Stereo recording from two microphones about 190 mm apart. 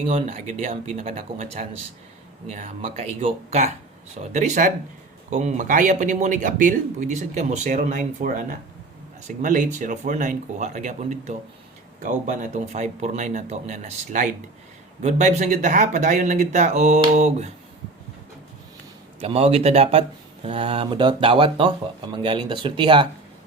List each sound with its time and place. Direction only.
0.1 s a man's voice: 40° right (ahead or behind)
19.2 s speech: 35° right (ahead or behind)